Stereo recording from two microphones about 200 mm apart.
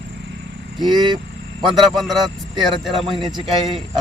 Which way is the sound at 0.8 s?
20° right (ahead or behind).